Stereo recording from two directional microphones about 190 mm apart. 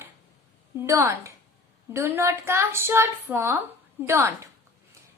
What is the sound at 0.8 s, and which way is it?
A woman's voice, 15° right (ahead or behind).